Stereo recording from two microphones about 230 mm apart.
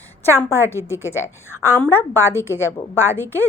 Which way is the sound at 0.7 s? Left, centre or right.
Centre.